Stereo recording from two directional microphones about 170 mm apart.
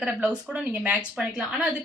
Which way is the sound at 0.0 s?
5° right (ahead or behind).